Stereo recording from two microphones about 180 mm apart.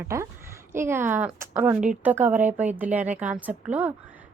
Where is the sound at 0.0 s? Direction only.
15° right (ahead or behind).